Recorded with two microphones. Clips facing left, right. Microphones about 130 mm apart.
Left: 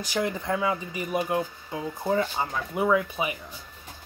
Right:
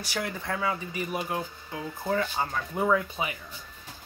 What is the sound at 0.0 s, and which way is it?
Speech, 20° left (ahead or behind).